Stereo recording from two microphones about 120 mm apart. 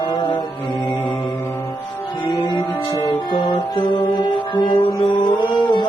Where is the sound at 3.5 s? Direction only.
40° left (ahead or behind).